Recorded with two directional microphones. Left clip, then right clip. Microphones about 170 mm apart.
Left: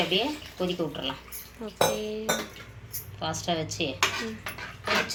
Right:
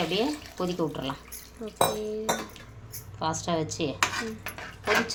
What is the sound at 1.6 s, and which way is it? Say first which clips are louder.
Speech: left 1 dB; 5° right (ahead or behind).